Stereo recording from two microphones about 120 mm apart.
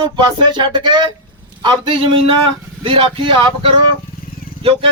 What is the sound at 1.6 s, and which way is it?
Speech, 40° right (ahead or behind).